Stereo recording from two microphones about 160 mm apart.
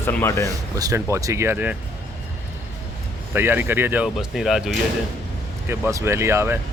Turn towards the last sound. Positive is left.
turn(degrees=-15)  # may be behind; listen again after turning